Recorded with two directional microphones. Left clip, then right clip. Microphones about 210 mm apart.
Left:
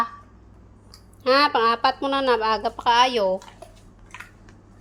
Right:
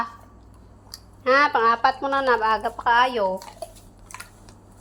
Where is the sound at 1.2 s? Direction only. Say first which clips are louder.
Even; 20° left (ahead or behind).